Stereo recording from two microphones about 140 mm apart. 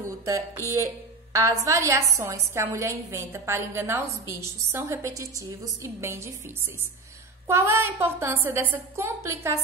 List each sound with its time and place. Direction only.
0.2 s a woman's voice: 20° right (ahead or behind)
7.4 s a woman's voice: 15° right (ahead or behind)